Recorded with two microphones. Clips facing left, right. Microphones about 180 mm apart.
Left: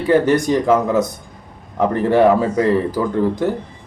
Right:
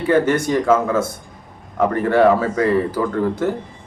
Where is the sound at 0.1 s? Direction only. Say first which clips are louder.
Left 2 dB; 15° left (ahead or behind).